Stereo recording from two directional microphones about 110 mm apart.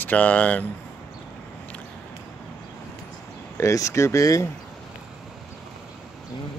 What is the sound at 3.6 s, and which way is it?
Speech, 30° left (ahead or behind).